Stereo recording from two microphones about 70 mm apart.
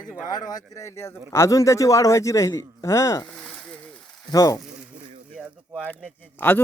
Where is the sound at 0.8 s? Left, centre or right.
Left.